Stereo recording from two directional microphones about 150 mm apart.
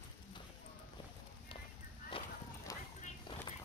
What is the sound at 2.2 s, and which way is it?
Run, 35° left (ahead or behind).